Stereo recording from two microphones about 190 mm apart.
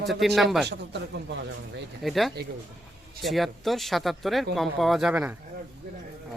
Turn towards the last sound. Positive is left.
turn(degrees=-10)  # may be behind; listen again after turning